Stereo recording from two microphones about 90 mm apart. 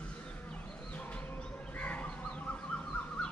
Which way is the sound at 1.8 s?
15° left (ahead or behind).